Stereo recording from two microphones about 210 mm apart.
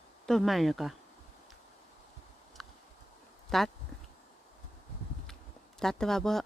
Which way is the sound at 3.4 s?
Centre (ahead or behind).